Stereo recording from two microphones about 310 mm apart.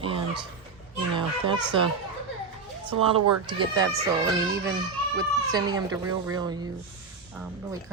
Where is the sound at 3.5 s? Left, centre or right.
Centre.